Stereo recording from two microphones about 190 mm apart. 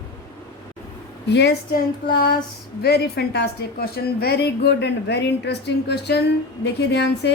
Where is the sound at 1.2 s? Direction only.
60° left (ahead or behind).